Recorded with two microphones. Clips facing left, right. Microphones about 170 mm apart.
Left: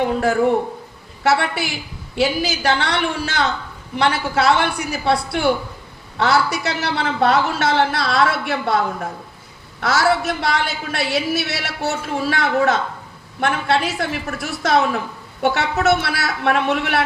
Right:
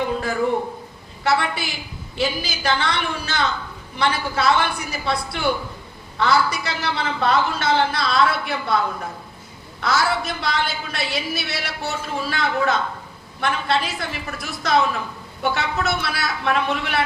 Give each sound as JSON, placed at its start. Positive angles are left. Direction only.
{"t": 1.2, "sound": "a man's voice", "side_deg": 75}
{"t": 9.8, "sound": "a man's voice", "side_deg": 75}
{"t": 15.4, "sound": "speech", "side_deg": 70}
{"t": 15.8, "sound": "a man's voice", "side_deg": 80}